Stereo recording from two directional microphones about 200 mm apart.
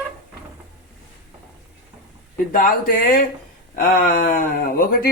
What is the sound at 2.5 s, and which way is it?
Speech, 45° left (ahead or behind).